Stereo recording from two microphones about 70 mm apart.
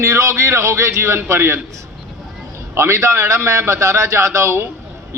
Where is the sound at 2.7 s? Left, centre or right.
Right.